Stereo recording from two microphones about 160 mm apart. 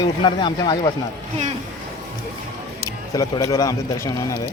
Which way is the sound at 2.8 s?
20° left (ahead or behind).